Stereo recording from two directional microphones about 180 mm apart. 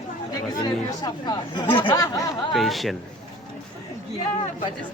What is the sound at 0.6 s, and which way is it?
Speech, 20° left (ahead or behind).